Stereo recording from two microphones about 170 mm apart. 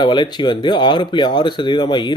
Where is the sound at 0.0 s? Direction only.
25° left (ahead or behind).